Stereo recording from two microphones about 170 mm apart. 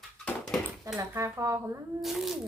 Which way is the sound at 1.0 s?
20° right (ahead or behind).